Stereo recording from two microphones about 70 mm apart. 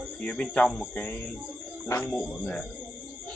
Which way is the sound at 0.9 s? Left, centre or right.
Centre.